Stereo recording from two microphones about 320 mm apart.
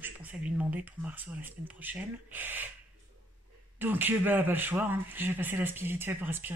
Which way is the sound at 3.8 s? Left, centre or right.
Centre.